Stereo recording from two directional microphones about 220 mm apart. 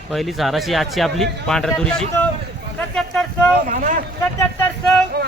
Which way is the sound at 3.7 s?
40° right (ahead or behind).